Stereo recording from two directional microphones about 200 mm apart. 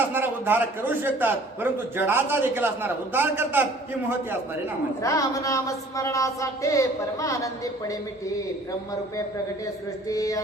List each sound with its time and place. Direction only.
0.1 s a man's voice: 10° right (ahead or behind)
5.0 s speech: 15° left (ahead or behind)
10.1 s speech: 15° left (ahead or behind)